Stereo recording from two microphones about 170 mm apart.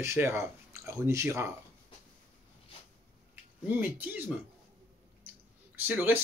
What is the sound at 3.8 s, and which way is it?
Speech, 10° right (ahead or behind).